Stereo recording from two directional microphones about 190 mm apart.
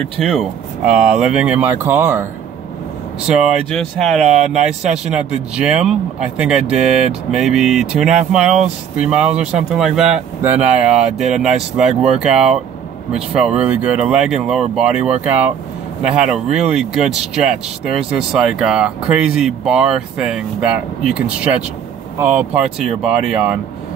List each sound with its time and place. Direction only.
0.2 s speech: centre (ahead or behind)
3.3 s speech: centre (ahead or behind)